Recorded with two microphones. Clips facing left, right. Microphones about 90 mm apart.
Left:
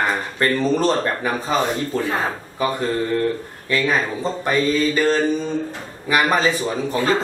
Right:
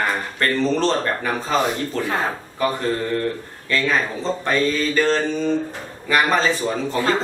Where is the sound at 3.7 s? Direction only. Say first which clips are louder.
Left 1 dB; 15° left (ahead or behind).